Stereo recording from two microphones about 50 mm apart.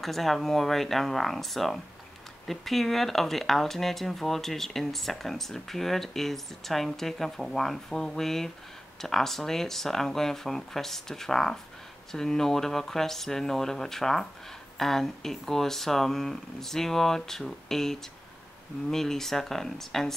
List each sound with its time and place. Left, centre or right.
0.0 s speech: centre